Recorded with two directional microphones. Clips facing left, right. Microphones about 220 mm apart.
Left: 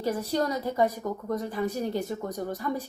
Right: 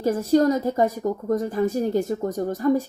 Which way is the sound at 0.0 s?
45° right (ahead or behind).